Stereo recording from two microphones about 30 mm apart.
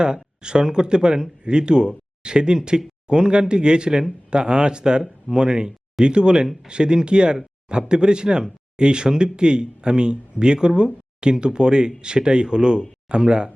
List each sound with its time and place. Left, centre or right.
0.0 s speech: right